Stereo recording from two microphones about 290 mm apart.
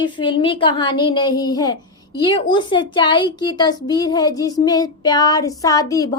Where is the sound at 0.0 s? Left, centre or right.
Centre.